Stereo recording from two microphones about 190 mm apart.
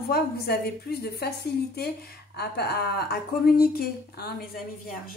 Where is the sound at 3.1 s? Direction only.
55° left (ahead or behind).